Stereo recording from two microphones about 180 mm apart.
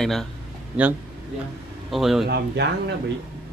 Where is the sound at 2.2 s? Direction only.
65° right (ahead or behind).